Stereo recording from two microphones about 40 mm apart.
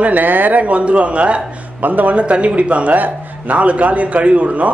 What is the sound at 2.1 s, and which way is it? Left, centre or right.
A man's voice, right.